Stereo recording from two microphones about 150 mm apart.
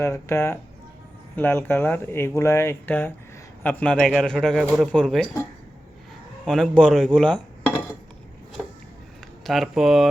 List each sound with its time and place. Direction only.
0.0 s a man's voice: 15° left (ahead or behind)
6.4 s speech: 5° left (ahead or behind)
9.4 s a man's voice: centre (ahead or behind)